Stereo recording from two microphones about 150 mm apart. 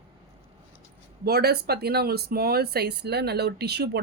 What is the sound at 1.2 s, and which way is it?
Speech, 90° right.